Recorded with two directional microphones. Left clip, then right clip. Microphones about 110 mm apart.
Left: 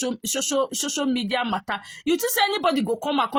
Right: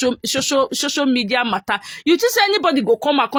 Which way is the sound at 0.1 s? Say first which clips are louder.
Right 6 dB; 30° right (ahead or behind).